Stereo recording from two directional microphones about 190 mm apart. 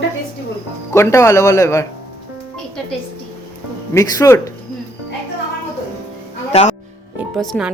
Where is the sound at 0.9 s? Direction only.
15° left (ahead or behind).